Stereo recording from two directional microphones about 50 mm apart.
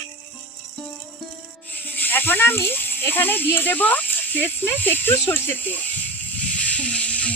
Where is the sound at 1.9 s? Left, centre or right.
Left.